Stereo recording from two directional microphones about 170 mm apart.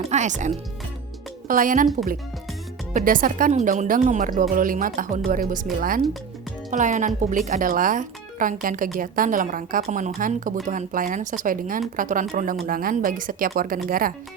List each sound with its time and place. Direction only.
0.1 s speech: 45° right (ahead or behind)
2.9 s speech: 55° right (ahead or behind)
6.7 s speech: 45° right (ahead or behind)